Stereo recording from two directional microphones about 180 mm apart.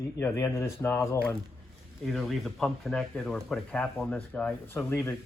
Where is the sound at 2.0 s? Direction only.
Centre (ahead or behind).